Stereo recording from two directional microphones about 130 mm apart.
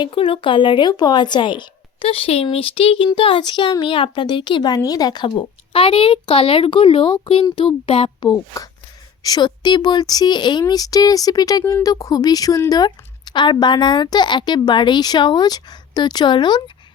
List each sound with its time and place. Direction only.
0.0 s a child's voice: 40° left (ahead or behind)
8.3 s speech: 30° left (ahead or behind)